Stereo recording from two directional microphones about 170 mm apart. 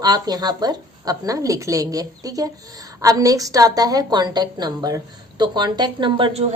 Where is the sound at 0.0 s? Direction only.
25° right (ahead or behind).